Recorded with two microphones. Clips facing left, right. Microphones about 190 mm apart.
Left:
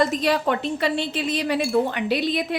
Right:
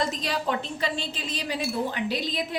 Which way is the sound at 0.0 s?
60° left (ahead or behind).